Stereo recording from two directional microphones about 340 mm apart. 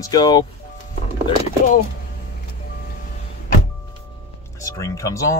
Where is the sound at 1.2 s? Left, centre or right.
Left.